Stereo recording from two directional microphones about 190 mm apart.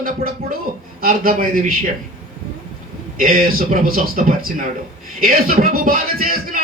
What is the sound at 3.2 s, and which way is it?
A man's voice, 45° right (ahead or behind).